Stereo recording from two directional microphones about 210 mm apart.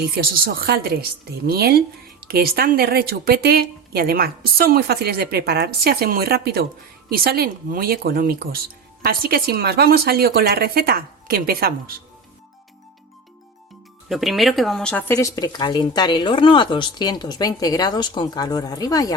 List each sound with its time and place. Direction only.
0.0 s a woman's voice: 45° right (ahead or behind)
14.1 s speech: centre (ahead or behind); by 19.1 s 15° left (ahead or behind)